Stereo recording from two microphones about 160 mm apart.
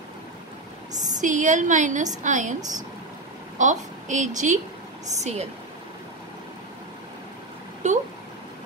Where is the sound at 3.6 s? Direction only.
50° right (ahead or behind).